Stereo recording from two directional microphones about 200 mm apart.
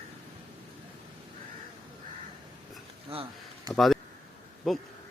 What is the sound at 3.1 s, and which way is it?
Speech, 25° right (ahead or behind).